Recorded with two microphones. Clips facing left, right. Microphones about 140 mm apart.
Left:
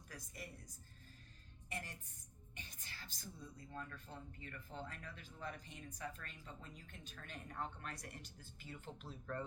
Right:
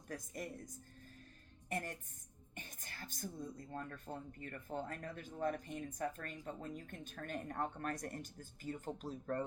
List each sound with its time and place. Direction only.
0.3 s speech: 50° right (ahead or behind)
1.7 s speech: 50° right (ahead or behind)